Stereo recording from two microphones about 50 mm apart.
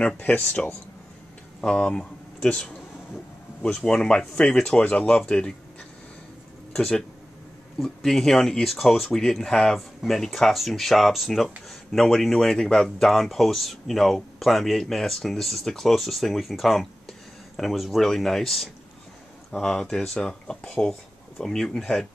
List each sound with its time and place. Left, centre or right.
0.0 s speech: left
1.6 s speech: centre
7.8 s speech: centre